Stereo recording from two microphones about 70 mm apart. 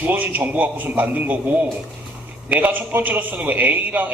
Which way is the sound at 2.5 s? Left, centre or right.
Right.